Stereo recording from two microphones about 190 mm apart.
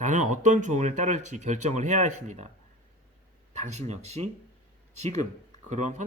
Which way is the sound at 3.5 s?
40° right (ahead or behind).